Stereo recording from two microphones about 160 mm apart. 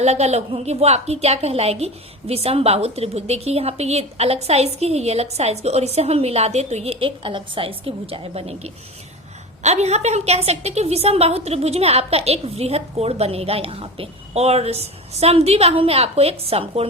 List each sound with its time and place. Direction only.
0.0 s a woman's voice: 45° right (ahead or behind)